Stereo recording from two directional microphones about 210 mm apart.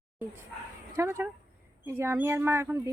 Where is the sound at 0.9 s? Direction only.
15° right (ahead or behind).